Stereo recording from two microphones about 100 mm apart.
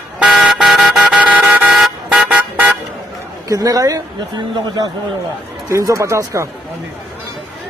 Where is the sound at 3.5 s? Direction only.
35° right (ahead or behind).